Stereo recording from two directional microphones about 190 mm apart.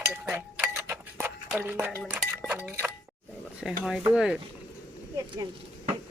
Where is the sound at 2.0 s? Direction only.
5° right (ahead or behind).